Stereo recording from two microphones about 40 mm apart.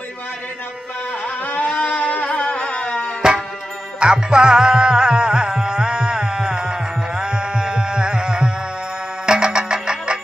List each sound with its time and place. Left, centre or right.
1.2 s music: left
3.2 s music: centre
4.0 s music: right